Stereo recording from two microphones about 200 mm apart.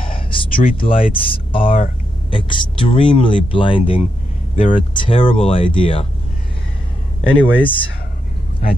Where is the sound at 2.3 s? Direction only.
25° left (ahead or behind).